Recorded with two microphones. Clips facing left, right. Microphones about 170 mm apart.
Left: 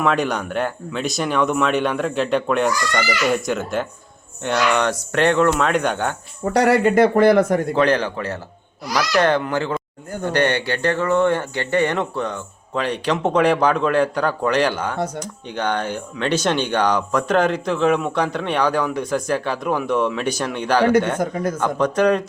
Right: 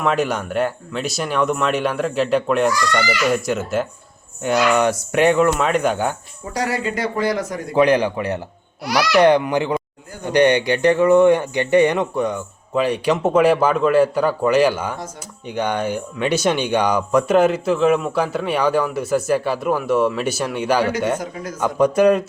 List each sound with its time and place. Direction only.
0.0 s speech: centre (ahead or behind)
6.4 s speech: 65° left (ahead or behind)
7.8 s speech: 15° right (ahead or behind)
8.8 s speech: 70° right (ahead or behind)
9.1 s speech: 15° right (ahead or behind)